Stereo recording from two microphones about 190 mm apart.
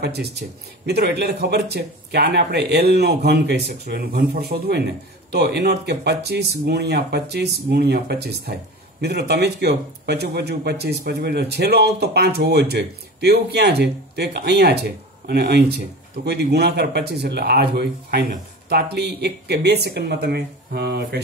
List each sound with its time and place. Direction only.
0.0 s speech: 55° right (ahead or behind)